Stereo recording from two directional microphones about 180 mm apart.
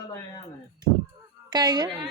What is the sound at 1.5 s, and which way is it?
Speech, 25° right (ahead or behind).